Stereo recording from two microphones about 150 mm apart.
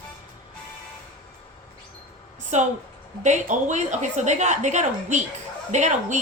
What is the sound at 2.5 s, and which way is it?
A woman's voice, 50° right (ahead or behind).